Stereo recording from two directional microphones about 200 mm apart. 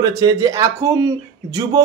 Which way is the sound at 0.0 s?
15° right (ahead or behind).